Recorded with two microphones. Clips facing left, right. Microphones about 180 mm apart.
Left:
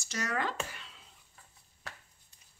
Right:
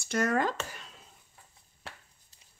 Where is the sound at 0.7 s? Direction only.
45° right (ahead or behind).